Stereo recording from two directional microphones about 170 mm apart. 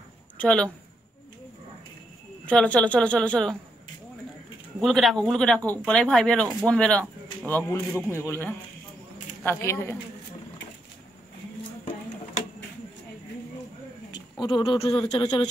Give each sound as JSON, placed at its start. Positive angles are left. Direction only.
{"t": 0.4, "sound": "a woman's voice", "side_deg": 5}
{"t": 2.4, "sound": "speech", "side_deg": 5}
{"t": 4.7, "sound": "a man's voice", "side_deg": 0}
{"t": 7.9, "sound": "speech", "side_deg": -10}
{"t": 8.3, "sound": "speech", "side_deg": 10}
{"t": 14.4, "sound": "speech", "side_deg": 30}